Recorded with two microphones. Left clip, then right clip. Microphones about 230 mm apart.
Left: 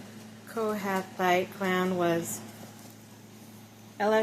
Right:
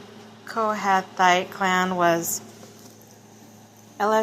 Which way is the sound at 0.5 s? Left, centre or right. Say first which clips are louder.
Right 9 dB; right.